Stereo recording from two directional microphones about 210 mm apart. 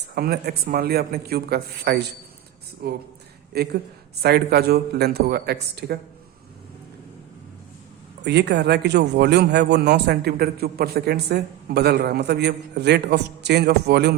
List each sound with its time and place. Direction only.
0.1 s a man's voice: 50° right (ahead or behind)
8.2 s a man's voice: 55° right (ahead or behind)